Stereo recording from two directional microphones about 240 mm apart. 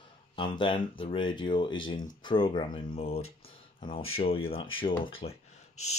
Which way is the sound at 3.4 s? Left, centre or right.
Left.